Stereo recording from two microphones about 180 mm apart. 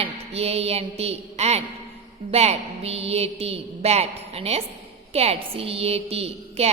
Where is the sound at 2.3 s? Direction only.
35° right (ahead or behind).